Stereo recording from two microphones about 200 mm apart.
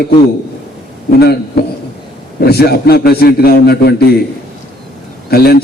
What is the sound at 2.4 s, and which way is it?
A man's voice, 50° left (ahead or behind).